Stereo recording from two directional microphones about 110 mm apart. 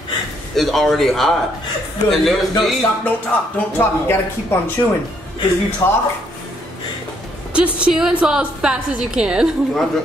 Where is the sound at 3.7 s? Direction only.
20° left (ahead or behind).